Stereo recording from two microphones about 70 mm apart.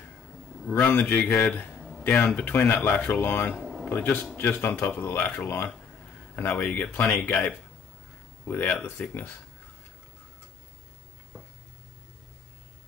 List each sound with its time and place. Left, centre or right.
0.7 s speech: left
3.5 s a sound: centre
3.9 s speech: left
8.5 s speech: left